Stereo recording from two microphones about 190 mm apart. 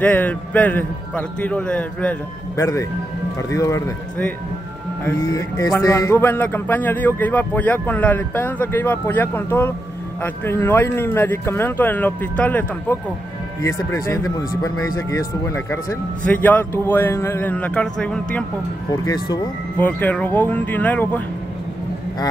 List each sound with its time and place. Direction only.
0.0 s speech: 10° left (ahead or behind)
18.9 s speech: 20° left (ahead or behind)
19.8 s speech: 10° left (ahead or behind)